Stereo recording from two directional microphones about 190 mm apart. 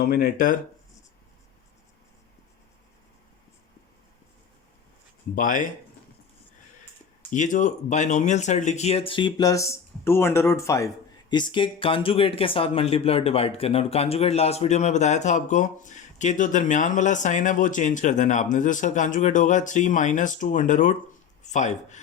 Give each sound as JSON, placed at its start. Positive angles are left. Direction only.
{"t": 0.0, "sound": "speech", "side_deg": 50}
{"t": 5.3, "sound": "speech", "side_deg": 45}
{"t": 7.3, "sound": "speech", "side_deg": 40}